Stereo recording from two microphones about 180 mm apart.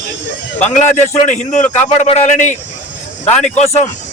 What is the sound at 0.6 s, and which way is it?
A man's voice, 40° left (ahead or behind).